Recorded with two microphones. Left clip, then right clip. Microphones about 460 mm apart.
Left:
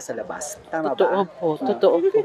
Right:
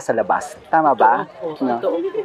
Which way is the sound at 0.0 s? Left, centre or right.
Right.